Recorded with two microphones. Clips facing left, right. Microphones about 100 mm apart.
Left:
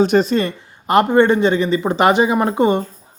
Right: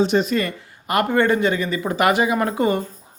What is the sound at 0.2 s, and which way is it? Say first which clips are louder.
Speech: left 4 dB; 30° left (ahead or behind).